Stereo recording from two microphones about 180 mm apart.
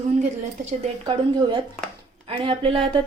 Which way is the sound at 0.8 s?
25° right (ahead or behind).